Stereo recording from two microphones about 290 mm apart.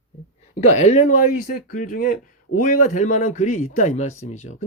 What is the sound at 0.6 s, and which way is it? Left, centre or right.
Speech, left.